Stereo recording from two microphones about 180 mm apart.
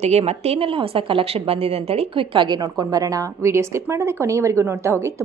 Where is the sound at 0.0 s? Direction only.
35° right (ahead or behind).